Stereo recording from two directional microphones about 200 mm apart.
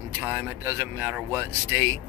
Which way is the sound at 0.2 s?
10° right (ahead or behind).